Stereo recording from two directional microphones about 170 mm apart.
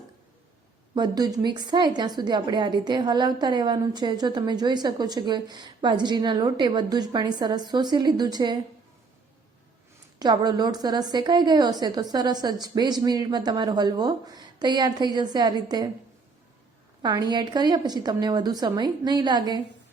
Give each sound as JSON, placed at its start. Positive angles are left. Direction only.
{"t": 0.9, "sound": "a woman's voice", "side_deg": -25}
{"t": 10.2, "sound": "a woman's voice", "side_deg": -25}
{"t": 17.0, "sound": "a woman's voice", "side_deg": -25}